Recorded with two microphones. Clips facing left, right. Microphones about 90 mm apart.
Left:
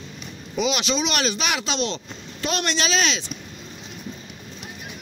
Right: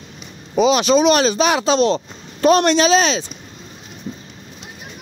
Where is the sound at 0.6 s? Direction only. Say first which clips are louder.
Right 10 dB; 40° right (ahead or behind).